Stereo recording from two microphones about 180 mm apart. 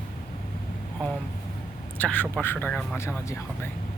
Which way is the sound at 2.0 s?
10° left (ahead or behind).